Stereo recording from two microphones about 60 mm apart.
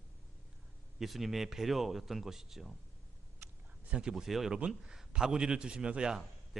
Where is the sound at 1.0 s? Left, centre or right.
Centre.